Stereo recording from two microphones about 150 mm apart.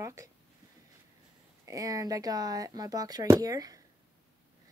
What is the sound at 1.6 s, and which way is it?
Speech, 25° right (ahead or behind).